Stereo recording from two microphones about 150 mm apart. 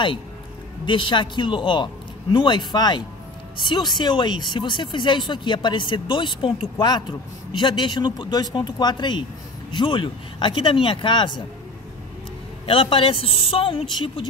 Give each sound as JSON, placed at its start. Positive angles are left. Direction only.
{"t": 0.8, "sound": "speech", "side_deg": 30}
{"t": 12.6, "sound": "speech", "side_deg": 35}